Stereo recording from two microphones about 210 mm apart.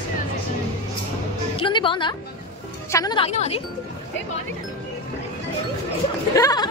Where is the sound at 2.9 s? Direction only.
20° left (ahead or behind).